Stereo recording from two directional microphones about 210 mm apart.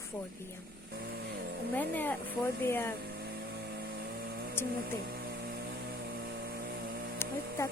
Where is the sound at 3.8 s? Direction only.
50° right (ahead or behind).